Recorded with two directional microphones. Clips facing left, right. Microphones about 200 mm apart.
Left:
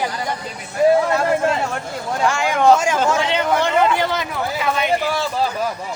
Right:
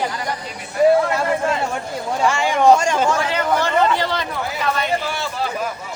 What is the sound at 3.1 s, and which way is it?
Speech, 25° left (ahead or behind).